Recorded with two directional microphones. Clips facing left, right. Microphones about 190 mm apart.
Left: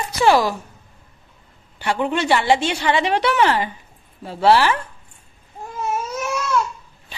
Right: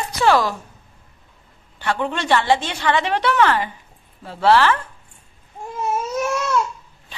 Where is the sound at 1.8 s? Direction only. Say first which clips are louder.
Left 2 dB; 15° left (ahead or behind).